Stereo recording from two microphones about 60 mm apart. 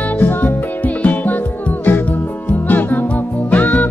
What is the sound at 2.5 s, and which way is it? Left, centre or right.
Music, left.